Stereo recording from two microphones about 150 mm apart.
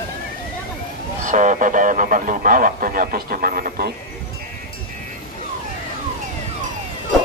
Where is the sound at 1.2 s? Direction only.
55° right (ahead or behind); by 3.9 s 80° right.